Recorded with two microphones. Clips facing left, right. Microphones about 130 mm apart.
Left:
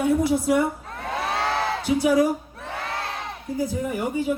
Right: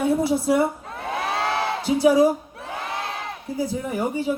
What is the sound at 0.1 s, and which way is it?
Speech, 30° right (ahead or behind).